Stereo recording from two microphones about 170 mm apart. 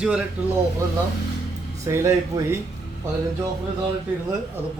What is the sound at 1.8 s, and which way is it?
Speech, 15° right (ahead or behind).